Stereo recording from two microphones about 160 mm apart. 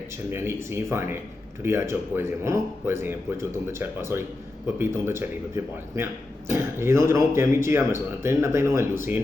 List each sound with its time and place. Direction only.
0.3 s speech: 15° right (ahead or behind)